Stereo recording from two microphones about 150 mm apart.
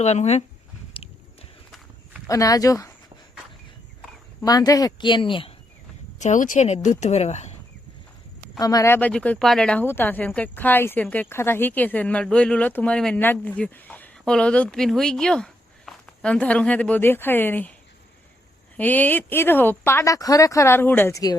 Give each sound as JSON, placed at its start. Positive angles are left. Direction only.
{"t": 0.0, "sound": "speech", "side_deg": 45}
{"t": 0.9, "sound": "a sound", "side_deg": 35}
{"t": 2.2, "sound": "speech", "side_deg": 25}
{"t": 4.4, "sound": "speech", "side_deg": 25}
{"t": 6.1, "sound": "speech", "side_deg": 55}
{"t": 8.5, "sound": "speech", "side_deg": 25}
{"t": 18.8, "sound": "speech", "side_deg": 10}